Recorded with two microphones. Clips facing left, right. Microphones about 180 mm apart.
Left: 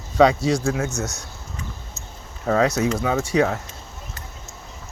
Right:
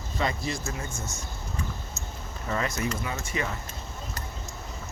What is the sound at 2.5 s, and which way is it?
Speech, 80° left.